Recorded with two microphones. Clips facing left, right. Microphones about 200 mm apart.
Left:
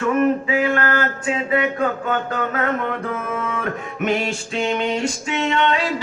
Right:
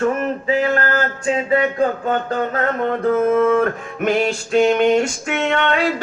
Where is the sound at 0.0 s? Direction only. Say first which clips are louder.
Left 2 dB; 35° right (ahead or behind).